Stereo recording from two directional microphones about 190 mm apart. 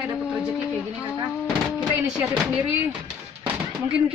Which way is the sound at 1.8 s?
5° right (ahead or behind).